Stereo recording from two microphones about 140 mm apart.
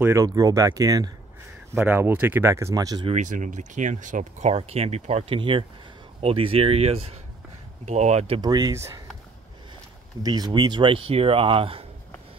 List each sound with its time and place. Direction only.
0.0 s speech: 25° right (ahead or behind)
3.1 s speech: 60° right (ahead or behind)
5.4 s speech: 40° right (ahead or behind)
8.4 s speech: 30° right (ahead or behind)
10.2 s speech: 30° right (ahead or behind)